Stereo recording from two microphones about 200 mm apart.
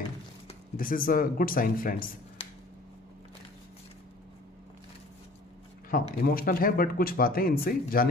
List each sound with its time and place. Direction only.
0.7 s speech: 45° left (ahead or behind)
5.9 s speech: 45° left (ahead or behind)